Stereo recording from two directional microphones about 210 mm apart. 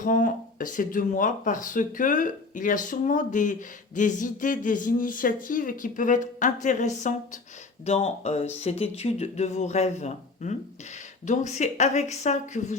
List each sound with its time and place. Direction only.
0.0 s speech: 40° left (ahead or behind)